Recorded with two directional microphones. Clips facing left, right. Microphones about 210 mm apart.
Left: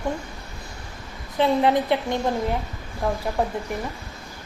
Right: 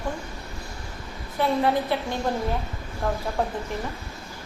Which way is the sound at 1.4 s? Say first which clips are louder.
Left 3 dB; 20° left (ahead or behind).